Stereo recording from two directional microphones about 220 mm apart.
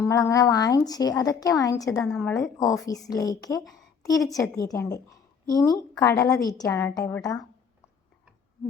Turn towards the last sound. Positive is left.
turn(degrees=15)  # may be behind; listen again after turning